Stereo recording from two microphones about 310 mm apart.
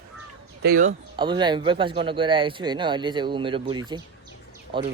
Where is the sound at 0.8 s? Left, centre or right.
Centre.